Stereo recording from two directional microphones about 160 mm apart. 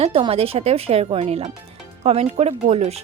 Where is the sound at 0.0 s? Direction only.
35° right (ahead or behind).